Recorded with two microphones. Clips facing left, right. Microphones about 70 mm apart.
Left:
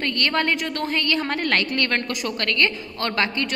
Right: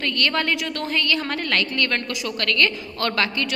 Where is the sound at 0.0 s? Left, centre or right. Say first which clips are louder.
Even; left.